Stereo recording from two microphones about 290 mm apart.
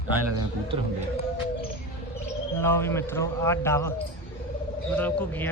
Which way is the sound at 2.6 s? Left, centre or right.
Centre.